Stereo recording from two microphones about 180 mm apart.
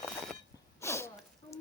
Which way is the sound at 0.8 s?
15° left (ahead or behind).